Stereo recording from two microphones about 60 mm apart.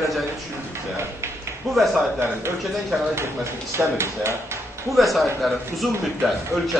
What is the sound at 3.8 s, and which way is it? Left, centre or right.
Speech, right.